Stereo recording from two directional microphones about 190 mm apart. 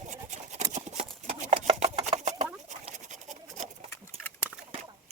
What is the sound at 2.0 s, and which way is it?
Chopping, 35° right (ahead or behind).